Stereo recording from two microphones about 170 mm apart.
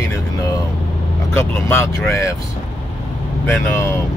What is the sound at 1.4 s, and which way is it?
Speech, 15° left (ahead or behind).